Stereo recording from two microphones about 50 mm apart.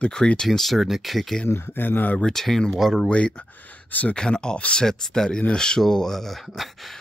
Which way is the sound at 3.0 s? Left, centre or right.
Left.